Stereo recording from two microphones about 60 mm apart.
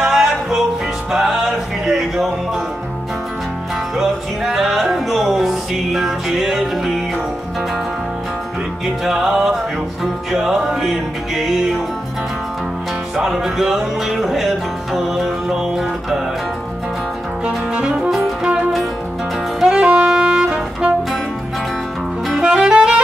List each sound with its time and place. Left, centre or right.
0.0 s music: centre
3.9 s music: centre
8.8 s music: centre
13.1 s music: centre
17.7 s music: centre
19.7 s saxophone: centre
22.3 s saxophone: centre